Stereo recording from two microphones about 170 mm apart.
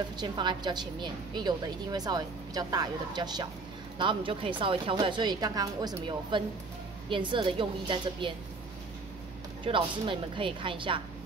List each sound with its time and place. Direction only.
0.2 s a woman's voice: 25° right (ahead or behind)
9.7 s speech: 30° right (ahead or behind)